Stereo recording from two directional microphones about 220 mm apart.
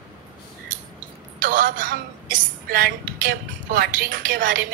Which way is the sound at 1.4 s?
40° right (ahead or behind).